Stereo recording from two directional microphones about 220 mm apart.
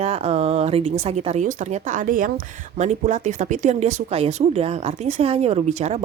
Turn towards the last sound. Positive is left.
turn(degrees=-30)  # may be behind; listen again after turning